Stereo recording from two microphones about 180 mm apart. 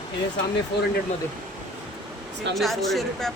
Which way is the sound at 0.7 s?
70° left (ahead or behind).